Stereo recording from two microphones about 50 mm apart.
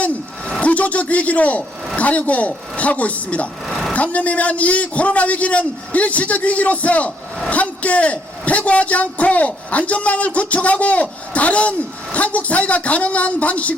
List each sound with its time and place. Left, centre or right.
0.6 s a man's voice: left
3.7 s vehicle: centre
3.9 s a man's voice: left